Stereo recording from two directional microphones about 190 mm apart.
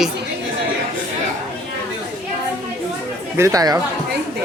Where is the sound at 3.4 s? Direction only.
15° right (ahead or behind).